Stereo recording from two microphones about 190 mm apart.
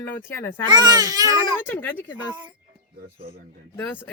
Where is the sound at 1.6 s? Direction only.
10° left (ahead or behind).